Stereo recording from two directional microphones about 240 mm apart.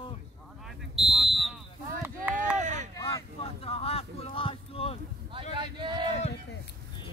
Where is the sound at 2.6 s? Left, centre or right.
Right.